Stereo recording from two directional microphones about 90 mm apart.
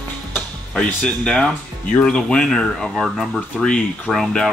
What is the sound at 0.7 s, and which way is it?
Speech, 10° left (ahead or behind).